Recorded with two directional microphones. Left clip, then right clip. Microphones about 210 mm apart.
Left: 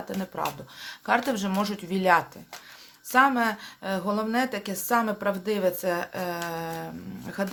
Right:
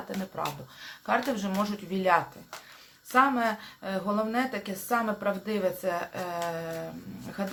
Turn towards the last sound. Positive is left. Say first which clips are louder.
# left 4 dB
turn(degrees=45)  # may be behind; listen again after turning